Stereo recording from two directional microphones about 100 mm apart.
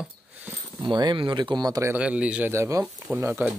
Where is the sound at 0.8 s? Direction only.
45° right (ahead or behind).